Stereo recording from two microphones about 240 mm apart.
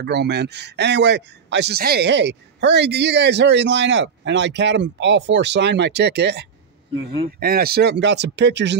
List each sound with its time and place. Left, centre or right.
0.0 s speech: right